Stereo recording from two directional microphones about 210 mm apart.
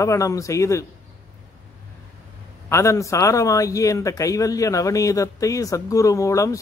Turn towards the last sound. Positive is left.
turn(degrees=15)  # may be behind; listen again after turning